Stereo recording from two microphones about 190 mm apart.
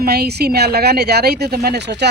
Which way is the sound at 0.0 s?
55° right (ahead or behind).